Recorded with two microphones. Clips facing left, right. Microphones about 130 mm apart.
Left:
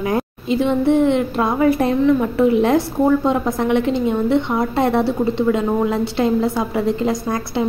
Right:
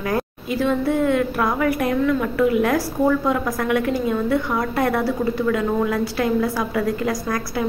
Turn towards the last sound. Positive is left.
turn(degrees=25)  # may be behind; listen again after turning